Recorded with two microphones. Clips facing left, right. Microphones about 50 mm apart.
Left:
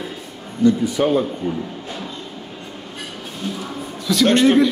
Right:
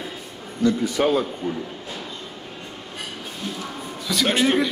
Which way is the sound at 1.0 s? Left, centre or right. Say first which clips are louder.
Left 1 dB; right.